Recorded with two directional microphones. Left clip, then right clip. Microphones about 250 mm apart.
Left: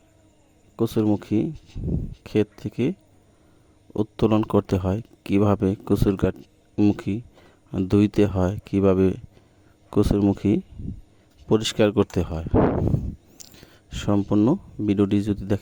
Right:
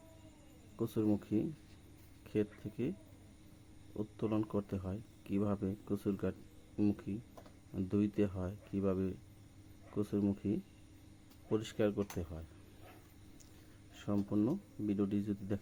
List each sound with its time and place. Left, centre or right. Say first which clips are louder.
0.8 s speech: left 13 dB; left
3.9 s speech: left 16 dB; left
13.4 s a sound: left 16 dB; left
13.9 s speech: left 15 dB; left